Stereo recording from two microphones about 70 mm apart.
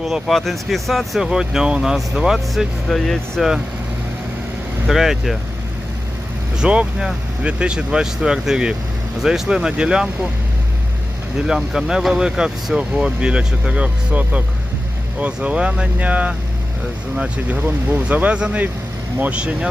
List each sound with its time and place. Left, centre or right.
0.0 s speech: centre
2.9 s speech: centre
4.9 s speech: centre
6.6 s speech: centre
11.3 s speech: centre